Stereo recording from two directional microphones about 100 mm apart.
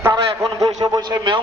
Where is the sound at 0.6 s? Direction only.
40° right (ahead or behind).